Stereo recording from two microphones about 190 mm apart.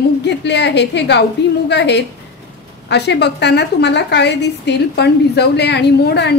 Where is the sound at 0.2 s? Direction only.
65° left (ahead or behind).